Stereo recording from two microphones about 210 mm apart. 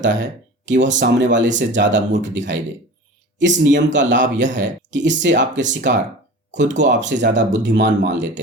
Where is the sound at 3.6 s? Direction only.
60° right (ahead or behind).